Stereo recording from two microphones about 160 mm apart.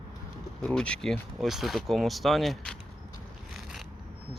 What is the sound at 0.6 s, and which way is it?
Speech, 5° left (ahead or behind).